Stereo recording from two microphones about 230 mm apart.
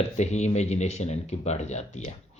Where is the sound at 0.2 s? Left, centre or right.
Left.